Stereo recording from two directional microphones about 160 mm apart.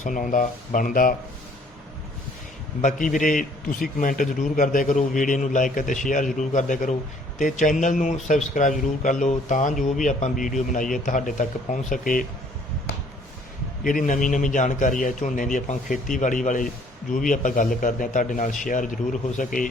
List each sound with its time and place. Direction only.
0.0 s a man's voice: 55° left (ahead or behind)
2.8 s a man's voice: 55° left (ahead or behind)
13.8 s a man's voice: 55° left (ahead or behind)